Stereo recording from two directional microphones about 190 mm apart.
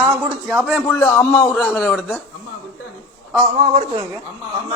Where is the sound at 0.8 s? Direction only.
10° left (ahead or behind).